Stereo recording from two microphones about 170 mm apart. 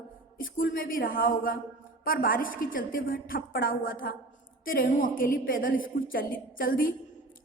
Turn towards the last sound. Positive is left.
turn(degrees=55)  # may be behind; listen again after turning